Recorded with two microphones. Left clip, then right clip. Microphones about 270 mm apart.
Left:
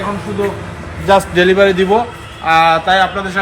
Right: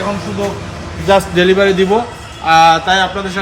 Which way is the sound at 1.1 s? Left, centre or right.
Centre.